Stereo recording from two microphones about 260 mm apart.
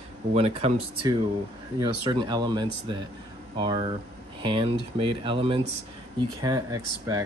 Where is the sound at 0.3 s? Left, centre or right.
Right.